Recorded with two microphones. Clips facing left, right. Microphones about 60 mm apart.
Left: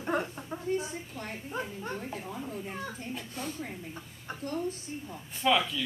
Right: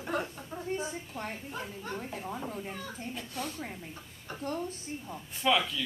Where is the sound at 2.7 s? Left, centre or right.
Left.